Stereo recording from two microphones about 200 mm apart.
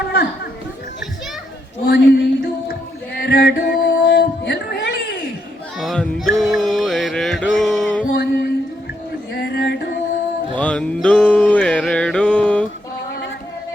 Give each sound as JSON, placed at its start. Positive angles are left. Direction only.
{"t": 1.9, "sound": "music", "side_deg": 60}
{"t": 5.8, "sound": "music", "side_deg": 0}
{"t": 8.1, "sound": "music", "side_deg": 55}
{"t": 9.3, "sound": "a sound", "side_deg": 55}
{"t": 10.6, "sound": "music", "side_deg": 5}